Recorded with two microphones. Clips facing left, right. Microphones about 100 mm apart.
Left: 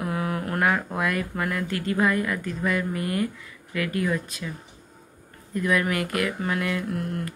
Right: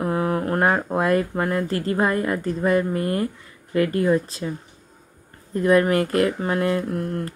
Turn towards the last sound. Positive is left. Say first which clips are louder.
# right 3 dB
turn(degrees=-35)  # may be behind; listen again after turning